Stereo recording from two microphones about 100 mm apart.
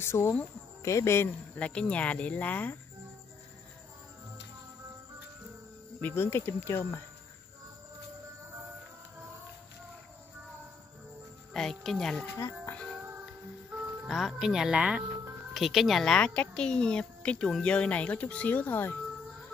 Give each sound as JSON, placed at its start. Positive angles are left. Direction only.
{"t": 0.0, "sound": "speech", "side_deg": 25}
{"t": 1.6, "sound": "a woman's voice", "side_deg": 15}
{"t": 5.9, "sound": "speech", "side_deg": 20}
{"t": 11.5, "sound": "speech", "side_deg": 5}
{"t": 12.4, "sound": "speech", "side_deg": 25}
{"t": 14.0, "sound": "a woman's voice", "side_deg": 0}